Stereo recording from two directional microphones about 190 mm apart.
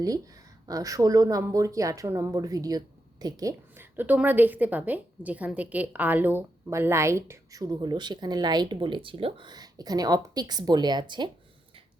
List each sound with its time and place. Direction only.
0.7 s speech: 20° right (ahead or behind)